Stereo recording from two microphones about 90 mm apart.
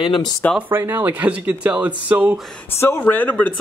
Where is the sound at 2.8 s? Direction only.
20° left (ahead or behind).